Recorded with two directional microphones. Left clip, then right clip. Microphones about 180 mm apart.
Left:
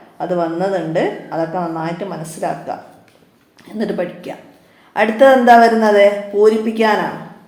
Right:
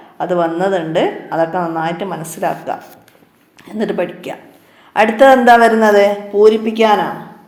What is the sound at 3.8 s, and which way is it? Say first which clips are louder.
Speech: right 3 dB; 25° right (ahead or behind).